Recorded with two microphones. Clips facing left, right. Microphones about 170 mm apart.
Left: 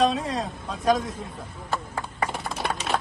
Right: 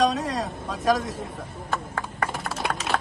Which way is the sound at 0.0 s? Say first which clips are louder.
Even; centre (ahead or behind).